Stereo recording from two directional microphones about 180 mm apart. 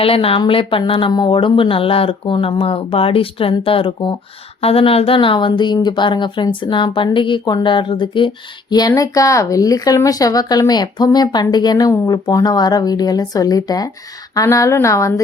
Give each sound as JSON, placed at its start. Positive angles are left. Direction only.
{"t": 0.0, "sound": "a woman's voice", "side_deg": 30}